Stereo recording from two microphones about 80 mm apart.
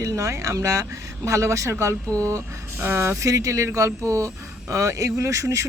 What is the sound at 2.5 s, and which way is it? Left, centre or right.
Speech, right.